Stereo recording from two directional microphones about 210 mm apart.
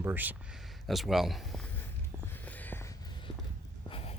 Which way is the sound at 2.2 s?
5° left (ahead or behind).